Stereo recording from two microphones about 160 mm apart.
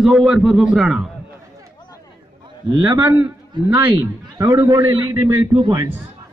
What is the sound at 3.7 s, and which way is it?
A man's voice, 25° right (ahead or behind).